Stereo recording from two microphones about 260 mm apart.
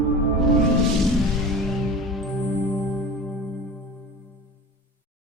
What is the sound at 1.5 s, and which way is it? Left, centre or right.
Music, centre.